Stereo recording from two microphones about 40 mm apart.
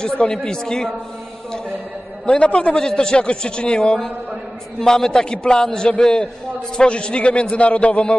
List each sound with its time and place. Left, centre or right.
0.0 s speech: centre
2.2 s a man's voice: left
2.8 s a man's voice: centre
4.7 s a man's voice: centre; by 8.2 s left